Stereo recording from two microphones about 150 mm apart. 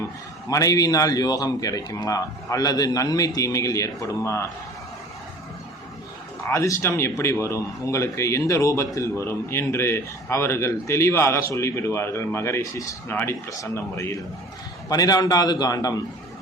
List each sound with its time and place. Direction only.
0.4 s a man's voice: 25° left (ahead or behind)
6.4 s a man's voice: 20° left (ahead or behind)